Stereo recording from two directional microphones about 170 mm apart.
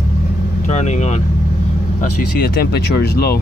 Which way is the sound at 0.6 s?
45° left (ahead or behind).